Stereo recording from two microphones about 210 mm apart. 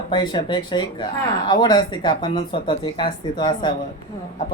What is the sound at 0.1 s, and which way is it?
Speech, 20° left (ahead or behind).